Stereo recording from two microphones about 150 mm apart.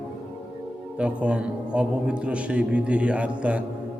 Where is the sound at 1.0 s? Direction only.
10° right (ahead or behind).